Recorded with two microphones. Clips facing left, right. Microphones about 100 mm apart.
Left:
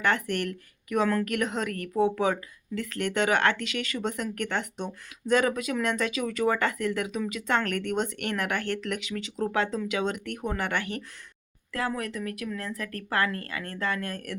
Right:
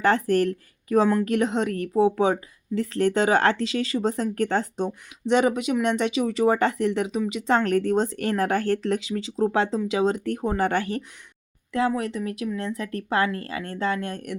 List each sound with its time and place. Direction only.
0.0 s a woman's voice: 35° right (ahead or behind)
11.7 s speech: 20° right (ahead or behind)